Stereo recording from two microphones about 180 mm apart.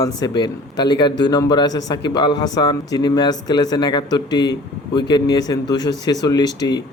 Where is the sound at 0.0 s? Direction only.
20° left (ahead or behind).